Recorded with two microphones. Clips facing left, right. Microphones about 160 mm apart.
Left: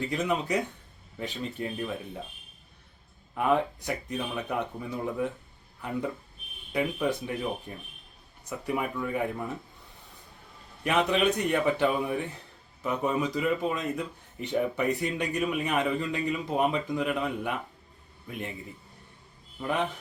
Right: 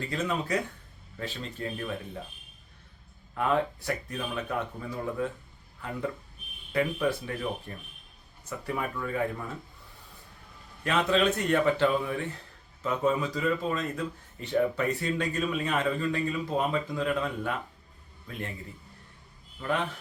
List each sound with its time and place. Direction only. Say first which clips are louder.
0.0 s a man's voice: left 2 dB; 20° left (ahead or behind)
3.3 s a man's voice: left 1 dB; 15° left (ahead or behind)
6.7 s a man's voice: even; 15° left (ahead or behind)
10.8 s a man's voice: even; 15° left (ahead or behind)
19.6 s a man's voice: left 1 dB; 20° left (ahead or behind)